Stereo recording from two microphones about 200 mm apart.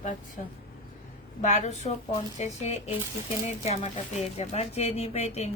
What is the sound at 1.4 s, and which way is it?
Speech, 35° left (ahead or behind).